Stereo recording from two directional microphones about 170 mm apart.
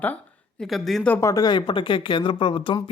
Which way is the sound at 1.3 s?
25° left (ahead or behind).